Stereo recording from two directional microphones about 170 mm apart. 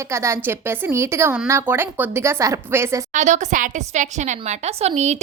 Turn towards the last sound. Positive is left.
turn(degrees=-40)  # may be behind; listen again after turning